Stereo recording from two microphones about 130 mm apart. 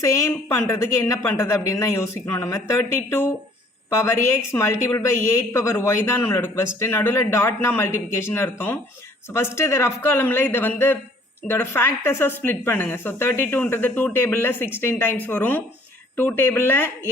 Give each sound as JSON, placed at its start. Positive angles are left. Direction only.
{"t": 0.0, "sound": "a woman's voice", "side_deg": 25}